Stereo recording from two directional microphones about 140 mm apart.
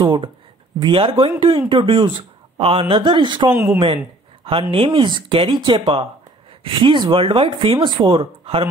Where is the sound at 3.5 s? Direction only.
15° right (ahead or behind).